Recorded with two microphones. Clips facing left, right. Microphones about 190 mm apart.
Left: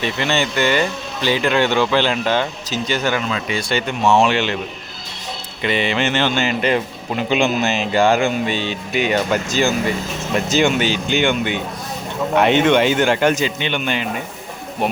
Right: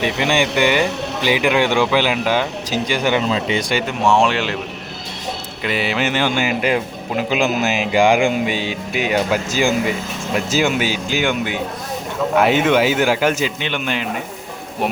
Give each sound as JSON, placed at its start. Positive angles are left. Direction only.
{"t": 0.0, "sound": "speech", "side_deg": -15}
{"t": 3.2, "sound": "speech", "side_deg": -25}
{"t": 4.0, "sound": "speech", "side_deg": 0}
{"t": 5.6, "sound": "speech", "side_deg": -5}